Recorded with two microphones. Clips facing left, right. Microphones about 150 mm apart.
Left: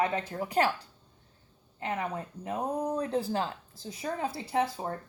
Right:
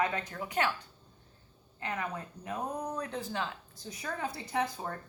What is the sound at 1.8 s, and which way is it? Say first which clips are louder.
Speech: left 4 dB; 25° left (ahead or behind).